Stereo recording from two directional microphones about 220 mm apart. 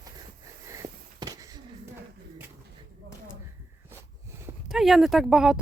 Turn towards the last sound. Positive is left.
turn(degrees=0)  # may be behind; listen again after turning